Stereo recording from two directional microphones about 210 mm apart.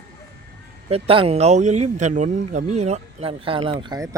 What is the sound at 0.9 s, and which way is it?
Speech, 25° right (ahead or behind).